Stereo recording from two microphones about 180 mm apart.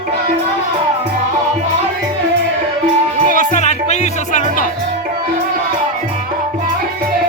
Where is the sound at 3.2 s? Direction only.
45° left (ahead or behind).